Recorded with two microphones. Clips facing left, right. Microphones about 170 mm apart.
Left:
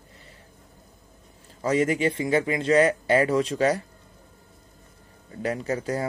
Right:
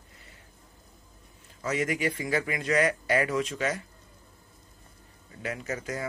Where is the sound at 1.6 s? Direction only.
30° left (ahead or behind).